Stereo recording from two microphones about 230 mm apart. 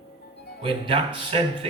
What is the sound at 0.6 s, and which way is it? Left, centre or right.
A man's voice, right.